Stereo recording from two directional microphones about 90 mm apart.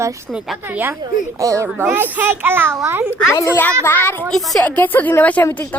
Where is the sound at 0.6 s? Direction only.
20° right (ahead or behind).